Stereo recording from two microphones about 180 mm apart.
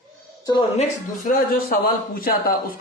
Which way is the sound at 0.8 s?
45° left (ahead or behind).